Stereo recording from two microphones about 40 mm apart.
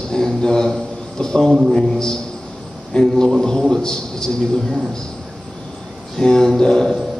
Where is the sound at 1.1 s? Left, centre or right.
Centre.